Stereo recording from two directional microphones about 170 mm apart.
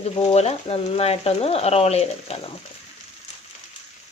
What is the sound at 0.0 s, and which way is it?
Speech, 35° left (ahead or behind).